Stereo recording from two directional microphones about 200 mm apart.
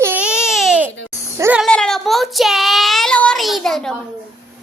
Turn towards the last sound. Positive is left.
turn(degrees=0)  # may be behind; listen again after turning